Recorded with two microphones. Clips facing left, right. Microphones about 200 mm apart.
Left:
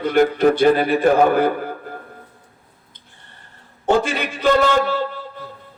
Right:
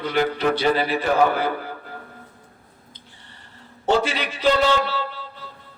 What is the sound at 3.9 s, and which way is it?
Speech, 50° left (ahead or behind).